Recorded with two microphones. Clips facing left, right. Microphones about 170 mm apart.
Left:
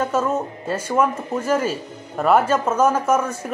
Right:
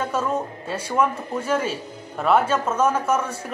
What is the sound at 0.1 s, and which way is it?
A woman's voice, 5° left (ahead or behind).